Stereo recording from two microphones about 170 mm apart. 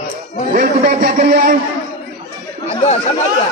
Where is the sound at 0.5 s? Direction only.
60° right (ahead or behind).